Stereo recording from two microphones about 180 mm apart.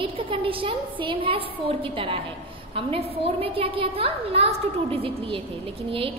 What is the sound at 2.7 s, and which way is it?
A woman's voice, 30° right (ahead or behind).